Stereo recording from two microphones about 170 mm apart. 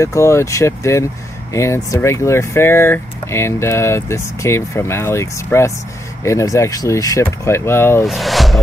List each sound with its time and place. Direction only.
0.0 s speech: 15° left (ahead or behind)
8.1 s speech: centre (ahead or behind)